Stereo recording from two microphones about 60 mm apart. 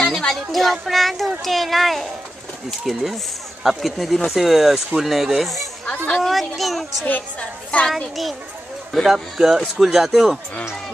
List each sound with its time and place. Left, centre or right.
0.0 s a sound: centre
0.5 s a man's voice: centre
7.1 s a woman's voice: left
7.9 s a man's voice: centre